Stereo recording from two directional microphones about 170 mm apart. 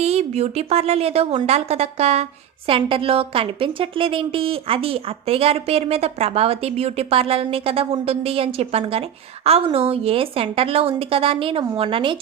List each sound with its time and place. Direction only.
0.0 s a woman's voice: 40° right (ahead or behind)